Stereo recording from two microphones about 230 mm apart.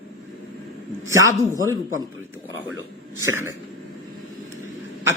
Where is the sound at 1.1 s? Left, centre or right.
Centre.